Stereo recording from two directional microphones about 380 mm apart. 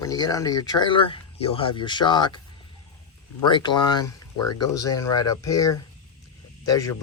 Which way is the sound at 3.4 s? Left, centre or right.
Centre.